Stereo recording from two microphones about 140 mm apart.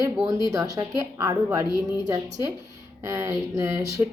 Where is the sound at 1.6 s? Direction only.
30° left (ahead or behind).